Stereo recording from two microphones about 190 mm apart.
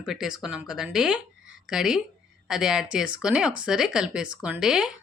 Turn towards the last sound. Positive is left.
turn(degrees=-5)  # may be behind; listen again after turning